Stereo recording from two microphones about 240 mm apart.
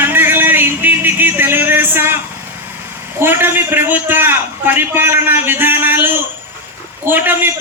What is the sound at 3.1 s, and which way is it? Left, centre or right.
A man's voice, centre.